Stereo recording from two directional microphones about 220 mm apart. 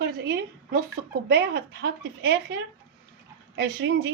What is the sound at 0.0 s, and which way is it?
A woman's voice, 50° right (ahead or behind).